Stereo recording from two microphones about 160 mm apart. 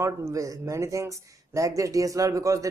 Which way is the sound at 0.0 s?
20° right (ahead or behind).